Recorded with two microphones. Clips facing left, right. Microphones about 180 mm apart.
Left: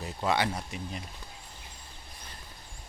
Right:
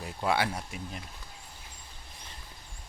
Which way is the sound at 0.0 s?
5° right (ahead or behind).